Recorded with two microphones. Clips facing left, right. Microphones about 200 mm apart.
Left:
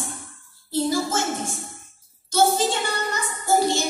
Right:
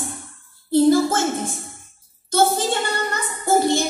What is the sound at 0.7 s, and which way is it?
Child singing, 60° right (ahead or behind).